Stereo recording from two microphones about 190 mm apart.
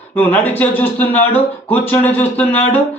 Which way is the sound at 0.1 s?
10° left (ahead or behind).